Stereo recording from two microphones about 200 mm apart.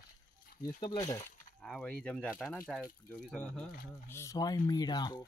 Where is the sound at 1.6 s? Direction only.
5° left (ahead or behind).